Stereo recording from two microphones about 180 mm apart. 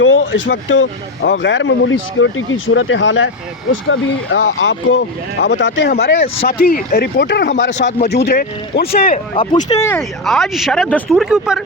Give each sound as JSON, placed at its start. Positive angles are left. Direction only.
{"t": 0.0, "sound": "speech", "side_deg": 90}
{"t": 6.6, "sound": "speech", "side_deg": 55}
{"t": 7.7, "sound": "speech", "side_deg": 40}
{"t": 8.0, "sound": "speech", "side_deg": 60}
{"t": 9.3, "sound": "speech", "side_deg": 30}
{"t": 10.0, "sound": "speech", "side_deg": 0}